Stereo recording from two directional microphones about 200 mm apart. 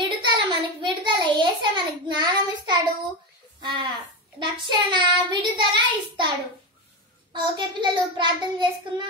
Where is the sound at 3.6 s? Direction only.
25° right (ahead or behind).